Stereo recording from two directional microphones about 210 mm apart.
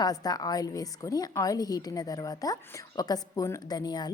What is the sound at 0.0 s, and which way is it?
A woman's voice, 20° left (ahead or behind).